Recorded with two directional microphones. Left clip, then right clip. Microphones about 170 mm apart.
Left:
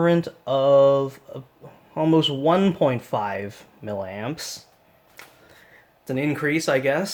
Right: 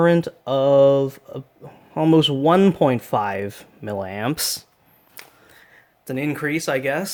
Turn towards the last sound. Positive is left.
turn(degrees=-30)  # may be behind; listen again after turning